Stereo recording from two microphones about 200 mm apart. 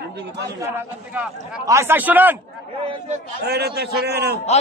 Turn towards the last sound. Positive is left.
turn(degrees=-55)  # may be behind; listen again after turning